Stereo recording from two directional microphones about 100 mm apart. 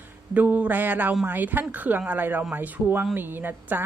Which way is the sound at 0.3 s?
15° right (ahead or behind).